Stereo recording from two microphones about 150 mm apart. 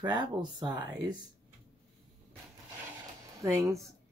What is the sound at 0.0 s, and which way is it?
Speech, 30° right (ahead or behind).